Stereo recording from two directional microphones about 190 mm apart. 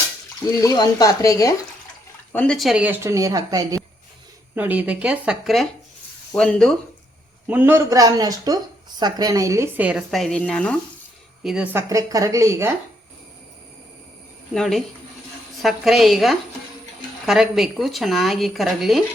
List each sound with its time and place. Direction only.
0.6 s speech: 20° left (ahead or behind)
2.3 s speech: 5° left (ahead or behind)
7.4 s speech: 10° right (ahead or behind)
14.5 s speech: centre (ahead or behind)